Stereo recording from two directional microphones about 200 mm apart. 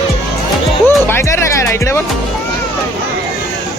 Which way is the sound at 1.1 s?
15° left (ahead or behind).